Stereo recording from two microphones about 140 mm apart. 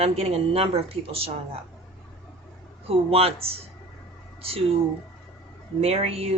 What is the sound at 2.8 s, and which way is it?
Speech, 45° right (ahead or behind).